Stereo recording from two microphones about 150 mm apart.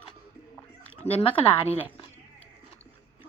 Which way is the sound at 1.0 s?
40° left (ahead or behind).